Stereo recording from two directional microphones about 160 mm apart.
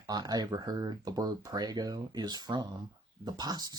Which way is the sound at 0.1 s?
25° right (ahead or behind).